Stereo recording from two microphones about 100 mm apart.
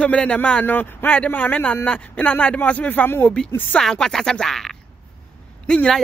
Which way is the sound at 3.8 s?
5° left (ahead or behind).